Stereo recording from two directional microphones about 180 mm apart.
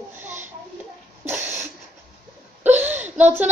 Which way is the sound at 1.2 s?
15° right (ahead or behind).